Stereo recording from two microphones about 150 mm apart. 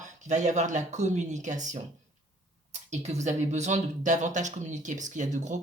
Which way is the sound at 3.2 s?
50° right (ahead or behind).